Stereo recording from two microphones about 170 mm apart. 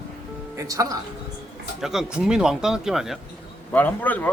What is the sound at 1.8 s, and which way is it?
A man's voice, centre (ahead or behind).